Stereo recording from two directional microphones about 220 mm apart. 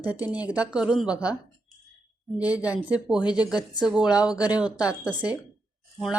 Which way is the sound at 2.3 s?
5° right (ahead or behind).